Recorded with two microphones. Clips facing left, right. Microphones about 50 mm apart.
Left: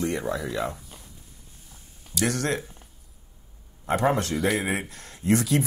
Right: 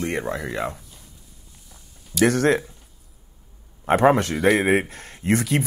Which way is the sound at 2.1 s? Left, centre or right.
Right.